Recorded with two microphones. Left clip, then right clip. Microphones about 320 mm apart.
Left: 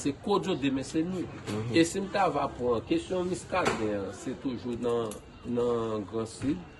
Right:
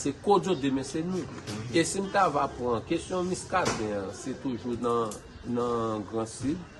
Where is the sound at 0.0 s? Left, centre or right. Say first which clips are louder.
Right 4 dB; centre.